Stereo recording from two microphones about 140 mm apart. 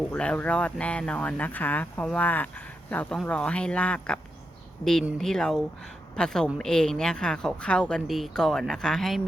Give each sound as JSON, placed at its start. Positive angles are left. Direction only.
{"t": 0.1, "sound": "speech", "side_deg": 10}
{"t": 4.8, "sound": "speech", "side_deg": 25}
{"t": 5.1, "sound": "speech", "side_deg": 5}